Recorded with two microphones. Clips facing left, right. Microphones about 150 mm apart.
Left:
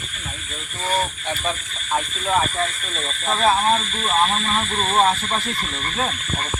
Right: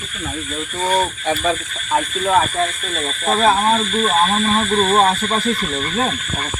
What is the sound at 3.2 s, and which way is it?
Speech, 45° right (ahead or behind).